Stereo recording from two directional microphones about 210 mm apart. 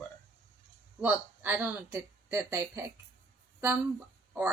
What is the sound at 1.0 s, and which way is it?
Speech, 10° right (ahead or behind).